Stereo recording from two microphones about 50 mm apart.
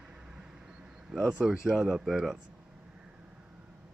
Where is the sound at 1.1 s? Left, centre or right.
Centre.